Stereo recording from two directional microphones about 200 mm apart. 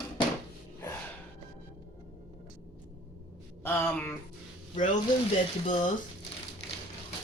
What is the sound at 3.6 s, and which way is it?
Speech, 10° left (ahead or behind).